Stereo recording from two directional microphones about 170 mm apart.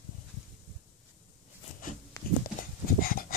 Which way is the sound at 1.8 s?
55° left (ahead or behind).